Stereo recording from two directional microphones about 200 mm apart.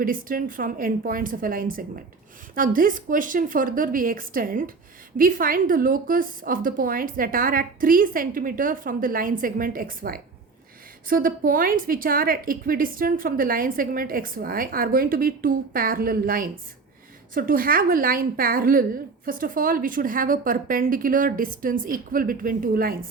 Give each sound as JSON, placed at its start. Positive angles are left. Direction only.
{"t": 0.0, "sound": "a woman's voice", "side_deg": -45}